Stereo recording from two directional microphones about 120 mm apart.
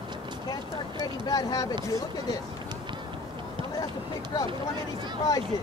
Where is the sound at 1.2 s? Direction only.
30° left (ahead or behind).